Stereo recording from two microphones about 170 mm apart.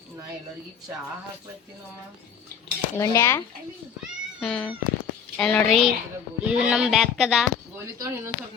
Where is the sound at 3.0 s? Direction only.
15° left (ahead or behind).